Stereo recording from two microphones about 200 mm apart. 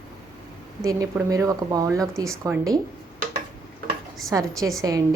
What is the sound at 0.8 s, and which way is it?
Speech, 15° right (ahead or behind).